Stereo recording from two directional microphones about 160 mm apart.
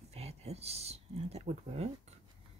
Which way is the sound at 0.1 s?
40° right (ahead or behind).